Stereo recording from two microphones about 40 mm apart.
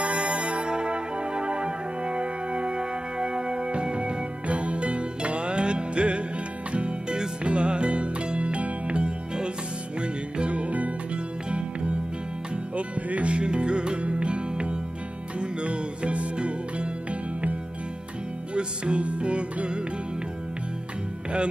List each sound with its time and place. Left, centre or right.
0.0 s music: right
12.7 s music: right